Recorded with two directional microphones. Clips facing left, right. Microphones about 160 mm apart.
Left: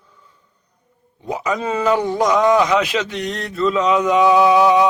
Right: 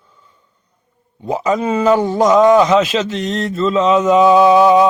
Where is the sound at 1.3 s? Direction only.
30° right (ahead or behind).